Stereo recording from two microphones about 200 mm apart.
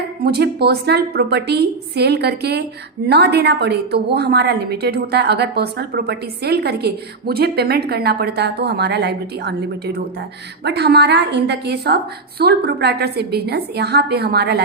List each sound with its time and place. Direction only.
0.3 s a woman's voice: 55° right (ahead or behind)